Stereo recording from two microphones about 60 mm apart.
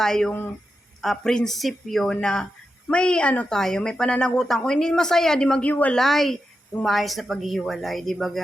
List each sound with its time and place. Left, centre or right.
0.0 s speech: centre
5.9 s a woman's voice: centre